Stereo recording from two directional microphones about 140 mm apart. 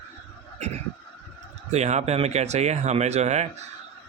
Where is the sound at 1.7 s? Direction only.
55° right (ahead or behind).